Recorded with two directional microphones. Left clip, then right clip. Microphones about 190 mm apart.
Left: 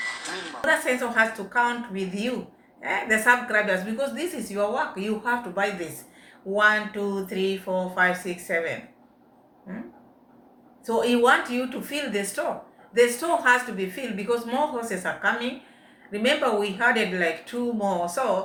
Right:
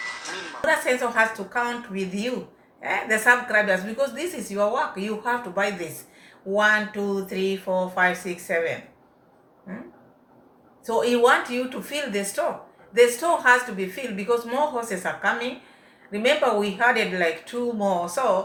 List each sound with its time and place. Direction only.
0.0 s a sound: 30° left (ahead or behind)
0.6 s a woman's voice: 5° left (ahead or behind)
10.8 s a woman's voice: 10° left (ahead or behind)